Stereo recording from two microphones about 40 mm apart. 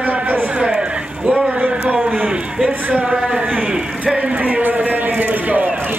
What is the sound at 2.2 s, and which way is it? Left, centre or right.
A man's voice, right.